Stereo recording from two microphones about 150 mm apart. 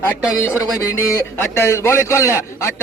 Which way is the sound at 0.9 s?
20° left (ahead or behind).